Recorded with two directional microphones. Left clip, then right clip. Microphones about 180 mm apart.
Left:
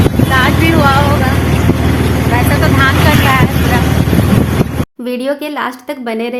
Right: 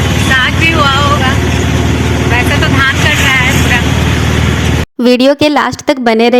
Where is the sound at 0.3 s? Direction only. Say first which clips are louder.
Right 2 dB; 20° left (ahead or behind).